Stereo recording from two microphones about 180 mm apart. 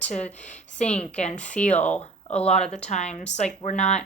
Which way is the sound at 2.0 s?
35° left (ahead or behind).